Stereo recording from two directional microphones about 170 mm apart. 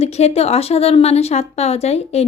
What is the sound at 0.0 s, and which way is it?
A woman's voice, 40° left (ahead or behind).